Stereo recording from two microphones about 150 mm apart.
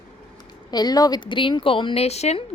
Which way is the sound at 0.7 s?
25° left (ahead or behind).